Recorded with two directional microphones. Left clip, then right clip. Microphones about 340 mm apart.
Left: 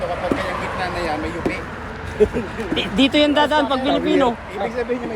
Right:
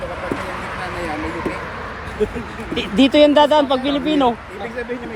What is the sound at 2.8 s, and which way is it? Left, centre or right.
Speech, centre.